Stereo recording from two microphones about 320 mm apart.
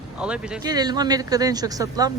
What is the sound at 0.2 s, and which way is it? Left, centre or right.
Speech, centre.